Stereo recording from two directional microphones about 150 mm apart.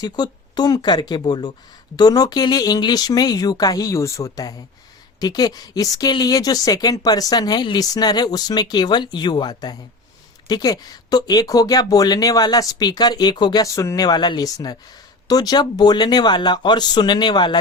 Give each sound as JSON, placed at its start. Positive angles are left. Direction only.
{"t": 0.0, "sound": "speech", "side_deg": 30}